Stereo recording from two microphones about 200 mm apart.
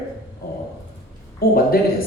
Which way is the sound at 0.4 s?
45° left (ahead or behind).